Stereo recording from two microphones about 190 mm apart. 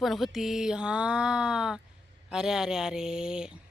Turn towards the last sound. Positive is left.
turn(degrees=-5)  # may be behind; listen again after turning